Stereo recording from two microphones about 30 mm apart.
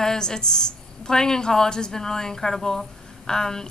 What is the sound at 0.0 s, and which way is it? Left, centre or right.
A woman's voice, centre.